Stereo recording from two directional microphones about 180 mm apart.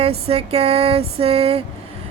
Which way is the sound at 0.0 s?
35° right (ahead or behind).